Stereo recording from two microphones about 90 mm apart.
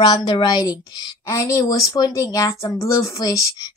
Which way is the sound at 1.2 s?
35° left (ahead or behind).